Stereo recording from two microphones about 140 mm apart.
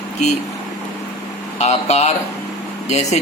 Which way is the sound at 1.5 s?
55° left (ahead or behind).